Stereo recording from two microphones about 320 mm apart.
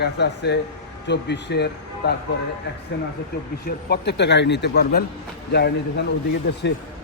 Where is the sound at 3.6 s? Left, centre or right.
Left.